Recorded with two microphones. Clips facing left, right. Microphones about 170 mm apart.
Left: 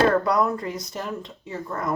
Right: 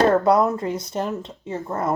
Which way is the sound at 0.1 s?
25° right (ahead or behind).